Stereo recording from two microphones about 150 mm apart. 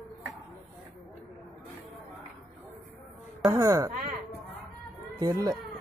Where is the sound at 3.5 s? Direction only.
20° right (ahead or behind).